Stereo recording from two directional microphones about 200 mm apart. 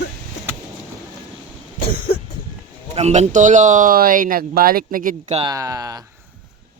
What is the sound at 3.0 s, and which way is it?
Speech, 35° right (ahead or behind).